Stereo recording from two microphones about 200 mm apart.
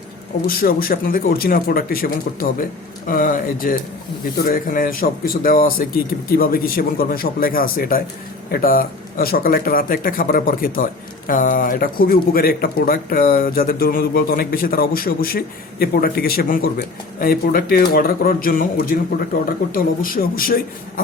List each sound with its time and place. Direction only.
0.4 s speech: 45° left (ahead or behind)